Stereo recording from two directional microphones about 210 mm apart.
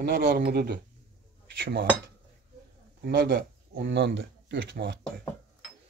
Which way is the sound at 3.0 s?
45° right (ahead or behind).